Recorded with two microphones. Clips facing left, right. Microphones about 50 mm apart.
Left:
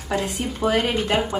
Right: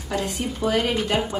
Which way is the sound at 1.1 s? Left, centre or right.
Centre.